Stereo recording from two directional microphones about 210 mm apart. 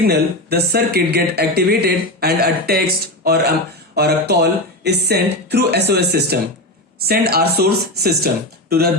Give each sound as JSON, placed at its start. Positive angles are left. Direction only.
{"t": 0.0, "sound": "speech", "side_deg": -50}